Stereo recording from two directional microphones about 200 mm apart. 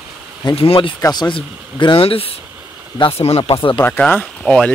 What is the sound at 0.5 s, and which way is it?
Speech, 25° left (ahead or behind).